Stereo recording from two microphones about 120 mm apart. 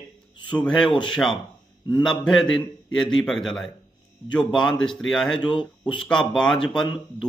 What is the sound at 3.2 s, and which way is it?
Speech, 5° left (ahead or behind).